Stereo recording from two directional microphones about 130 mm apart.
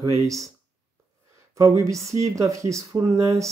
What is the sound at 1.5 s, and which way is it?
Speech, 25° right (ahead or behind).